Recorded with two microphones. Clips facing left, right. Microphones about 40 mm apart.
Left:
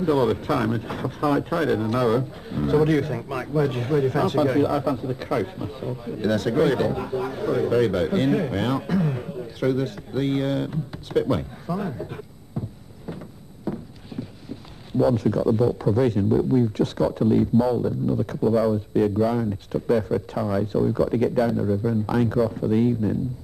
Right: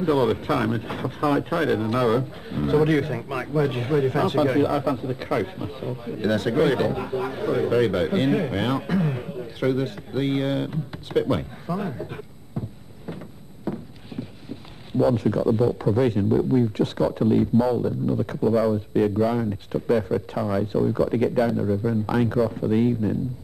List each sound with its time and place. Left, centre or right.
0.0 s speech: right
12.5 s a sound: right
15.1 s speech: right
16.3 s speech: centre
16.5 s speech: right
17.6 s speech: centre
18.9 s speech: centre
21.5 s speech: centre
22.0 s speech: right